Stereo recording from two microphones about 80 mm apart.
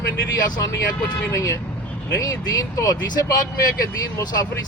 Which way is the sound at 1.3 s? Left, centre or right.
Left.